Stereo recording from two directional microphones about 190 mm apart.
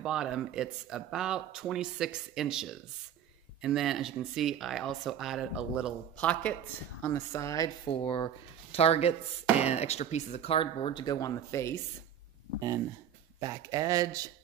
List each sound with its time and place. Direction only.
0.0 s speech: 5° right (ahead or behind)
6.1 s speech: 5° left (ahead or behind)
13.4 s speech: 15° right (ahead or behind)